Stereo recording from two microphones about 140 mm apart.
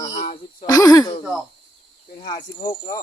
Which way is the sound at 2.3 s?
25° left (ahead or behind).